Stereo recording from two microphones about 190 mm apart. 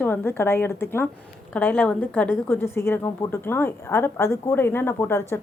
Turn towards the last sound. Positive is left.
turn(degrees=15)  # may be behind; listen again after turning